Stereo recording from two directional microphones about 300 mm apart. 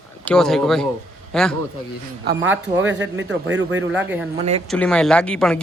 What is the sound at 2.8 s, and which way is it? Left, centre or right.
A man's voice, right.